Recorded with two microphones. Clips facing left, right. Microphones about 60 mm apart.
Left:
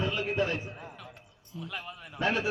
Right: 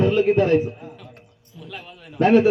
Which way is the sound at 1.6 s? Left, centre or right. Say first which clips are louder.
Right 3 dB; centre.